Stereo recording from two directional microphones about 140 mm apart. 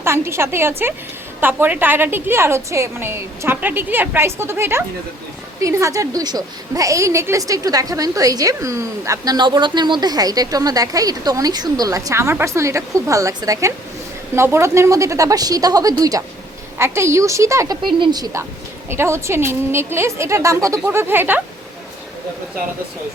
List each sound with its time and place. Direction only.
0.0 s a woman's voice: 20° right (ahead or behind)
17.8 s a woman's voice: 30° right (ahead or behind)
18.9 s a woman's voice: 20° right (ahead or behind)